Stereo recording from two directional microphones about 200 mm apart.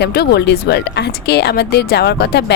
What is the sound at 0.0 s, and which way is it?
A woman's voice, 55° left (ahead or behind).